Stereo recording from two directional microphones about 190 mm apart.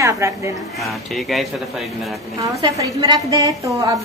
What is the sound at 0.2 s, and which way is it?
Speech, 15° right (ahead or behind).